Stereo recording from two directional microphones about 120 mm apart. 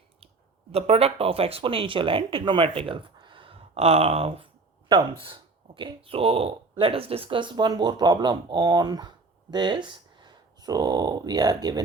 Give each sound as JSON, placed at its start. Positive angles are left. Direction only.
{"t": 0.7, "sound": "speech", "side_deg": -60}